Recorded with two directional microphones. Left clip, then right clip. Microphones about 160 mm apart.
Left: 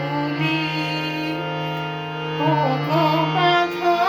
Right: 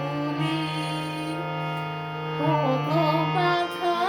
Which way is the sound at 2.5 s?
20° left (ahead or behind).